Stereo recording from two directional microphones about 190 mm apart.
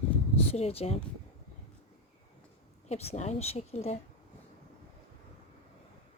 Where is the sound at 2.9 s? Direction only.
35° left (ahead or behind).